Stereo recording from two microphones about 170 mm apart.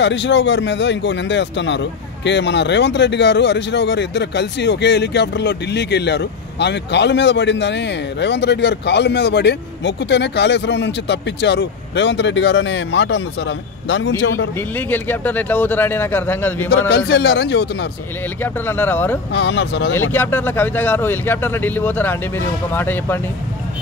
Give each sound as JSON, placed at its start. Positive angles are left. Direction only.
{"t": 0.0, "sound": "a man's voice", "side_deg": 90}
{"t": 14.9, "sound": "speech", "side_deg": 10}
{"t": 16.9, "sound": "a man's voice", "side_deg": 80}
{"t": 18.4, "sound": "speech", "side_deg": 10}
{"t": 19.3, "sound": "a man's voice", "side_deg": 90}
{"t": 20.1, "sound": "speech", "side_deg": 10}